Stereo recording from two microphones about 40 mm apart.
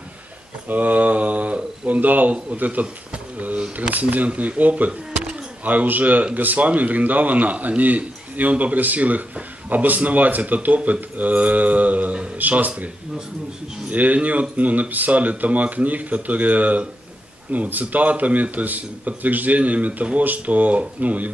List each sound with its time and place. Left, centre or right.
0.7 s speech: right
3.1 s a sound: right
3.9 s speech: right